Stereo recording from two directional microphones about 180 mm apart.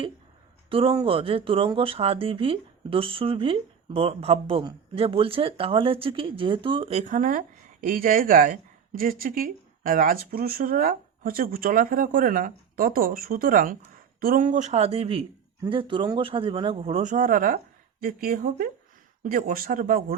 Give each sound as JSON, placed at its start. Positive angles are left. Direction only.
{"t": 0.7, "sound": "speech", "side_deg": -30}
{"t": 7.1, "sound": "a woman's voice", "side_deg": -50}